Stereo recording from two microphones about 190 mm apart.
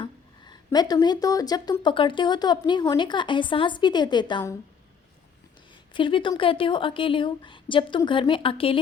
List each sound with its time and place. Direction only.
0.0 s speech: 20° left (ahead or behind)
5.7 s speech: 25° left (ahead or behind)